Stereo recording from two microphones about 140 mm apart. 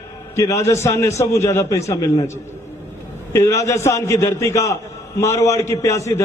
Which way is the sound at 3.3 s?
20° left (ahead or behind).